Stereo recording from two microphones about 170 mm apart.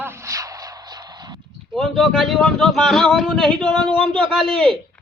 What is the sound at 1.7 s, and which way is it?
Speech, centre (ahead or behind).